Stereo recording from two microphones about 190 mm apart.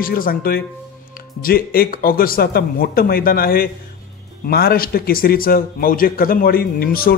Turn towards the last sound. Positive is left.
turn(degrees=50)  # may be behind; listen again after turning